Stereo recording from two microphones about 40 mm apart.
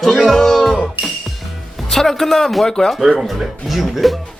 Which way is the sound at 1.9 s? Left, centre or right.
Centre.